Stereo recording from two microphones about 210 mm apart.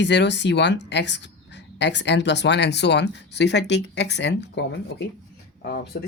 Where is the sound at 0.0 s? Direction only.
55° left (ahead or behind).